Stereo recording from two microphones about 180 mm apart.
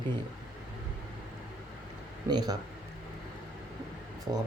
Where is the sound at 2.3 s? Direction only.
25° right (ahead or behind).